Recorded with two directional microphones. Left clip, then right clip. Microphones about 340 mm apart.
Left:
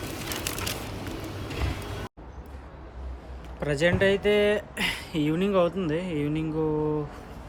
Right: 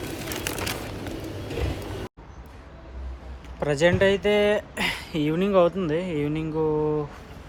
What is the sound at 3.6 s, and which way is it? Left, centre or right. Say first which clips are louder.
Speech: right 3 dB; centre.